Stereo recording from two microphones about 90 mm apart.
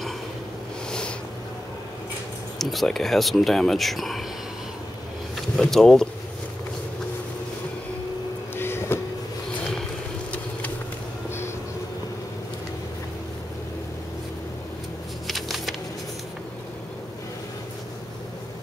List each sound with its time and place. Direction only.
2.6 s speech: centre (ahead or behind)
5.6 s speech: 5° left (ahead or behind)
8.5 s vehicle: 25° left (ahead or behind)
15.2 s a sound: centre (ahead or behind)